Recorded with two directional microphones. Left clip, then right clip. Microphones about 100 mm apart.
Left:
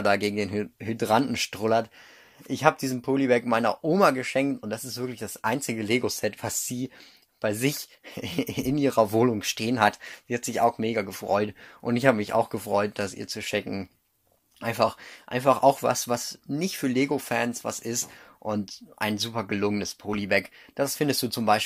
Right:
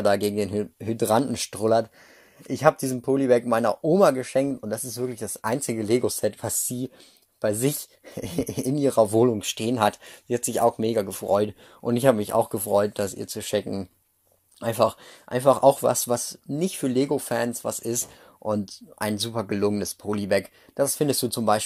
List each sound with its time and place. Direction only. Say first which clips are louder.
0.0 s speech: right 2 dB; 30° right (ahead or behind)
10.2 s speech: right 2 dB; 55° right (ahead or behind)
11.9 s speech: right 2 dB; 35° right (ahead or behind)